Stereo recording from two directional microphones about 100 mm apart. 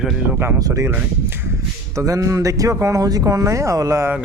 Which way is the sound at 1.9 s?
35° right (ahead or behind).